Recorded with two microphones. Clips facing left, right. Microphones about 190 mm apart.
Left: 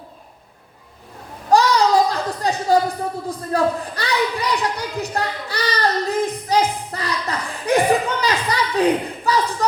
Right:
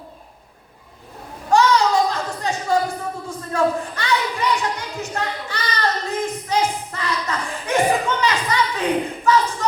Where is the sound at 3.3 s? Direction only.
35° left (ahead or behind).